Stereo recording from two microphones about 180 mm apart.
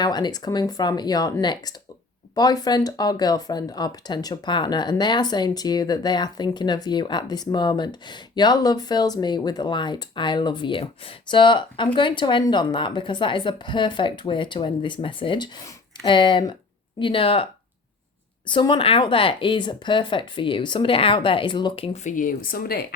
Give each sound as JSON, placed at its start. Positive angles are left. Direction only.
{"t": 0.0, "sound": "speech", "side_deg": 25}
{"t": 18.4, "sound": "speech", "side_deg": 25}
{"t": 21.9, "sound": "speech", "side_deg": 45}